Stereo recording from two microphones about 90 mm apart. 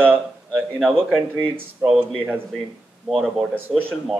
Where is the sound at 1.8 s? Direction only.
10° right (ahead or behind).